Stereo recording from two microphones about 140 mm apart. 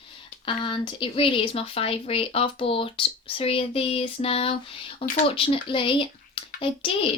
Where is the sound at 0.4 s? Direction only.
35° left (ahead or behind).